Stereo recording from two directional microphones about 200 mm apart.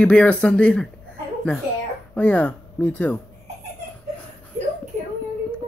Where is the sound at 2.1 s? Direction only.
5° left (ahead or behind).